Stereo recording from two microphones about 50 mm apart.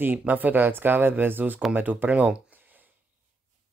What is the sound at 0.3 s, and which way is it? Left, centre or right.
Speech, right.